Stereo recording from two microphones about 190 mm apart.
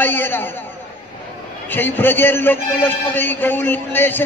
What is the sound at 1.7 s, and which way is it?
A man's voice, 10° left (ahead or behind).